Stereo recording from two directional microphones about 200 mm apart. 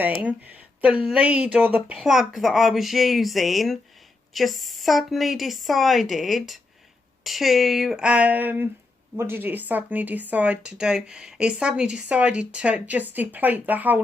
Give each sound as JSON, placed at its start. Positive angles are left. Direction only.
{"t": 0.0, "sound": "a woman's voice", "side_deg": -10}